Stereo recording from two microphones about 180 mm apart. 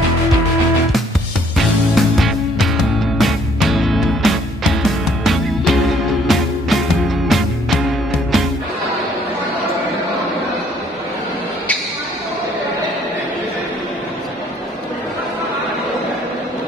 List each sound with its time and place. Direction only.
2.0 s music: centre (ahead or behind)